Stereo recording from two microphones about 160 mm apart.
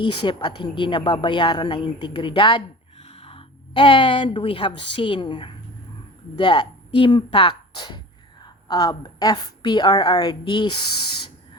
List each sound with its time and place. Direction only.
0.0 s a woman's voice: 30° left (ahead or behind)
3.0 s a woman's voice: 40° left (ahead or behind)